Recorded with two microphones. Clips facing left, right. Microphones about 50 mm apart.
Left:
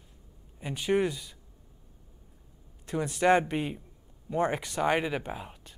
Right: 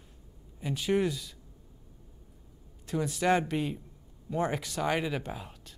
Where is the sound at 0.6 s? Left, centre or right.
Centre.